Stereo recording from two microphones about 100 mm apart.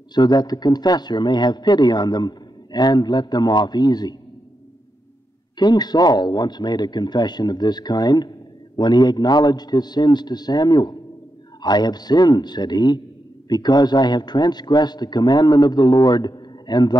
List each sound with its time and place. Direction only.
0.1 s a man's voice: 45° left (ahead or behind)
5.6 s a man's voice: 45° left (ahead or behind)